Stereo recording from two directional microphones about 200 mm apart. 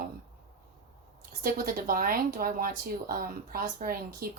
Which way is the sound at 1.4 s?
45° right (ahead or behind).